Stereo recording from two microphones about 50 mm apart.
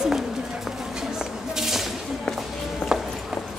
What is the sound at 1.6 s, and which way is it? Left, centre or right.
Whip, centre.